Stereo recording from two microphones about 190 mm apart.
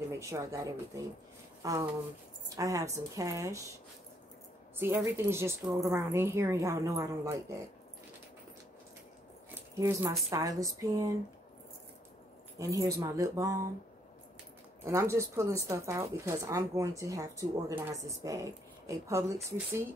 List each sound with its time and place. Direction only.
0.2 s speech: 15° right (ahead or behind)
4.7 s speech: 15° right (ahead or behind)
9.8 s speech: 15° right (ahead or behind)
12.5 s speech: 15° right (ahead or behind)
14.9 s speech: 15° right (ahead or behind)